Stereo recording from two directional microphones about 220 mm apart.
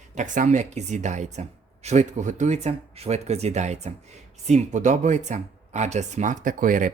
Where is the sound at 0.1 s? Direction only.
35° right (ahead or behind).